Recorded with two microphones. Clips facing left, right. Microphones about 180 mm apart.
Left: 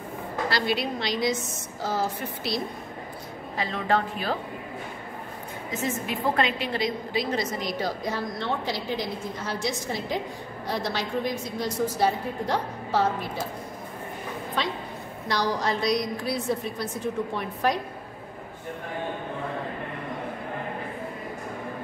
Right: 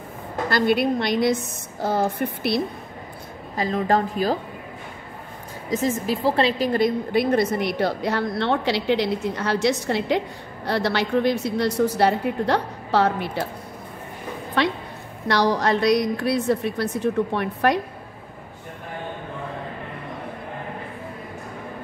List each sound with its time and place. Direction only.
0.5 s a woman's voice: 50° right (ahead or behind)
3.5 s a woman's voice: 40° right (ahead or behind)
5.7 s a woman's voice: 35° right (ahead or behind)
6.7 s a woman's voice: 55° right (ahead or behind); by 13.5 s 70° right (ahead or behind)
14.6 s a woman's voice: 70° right (ahead or behind)